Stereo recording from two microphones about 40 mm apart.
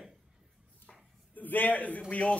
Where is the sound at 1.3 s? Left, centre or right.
Left.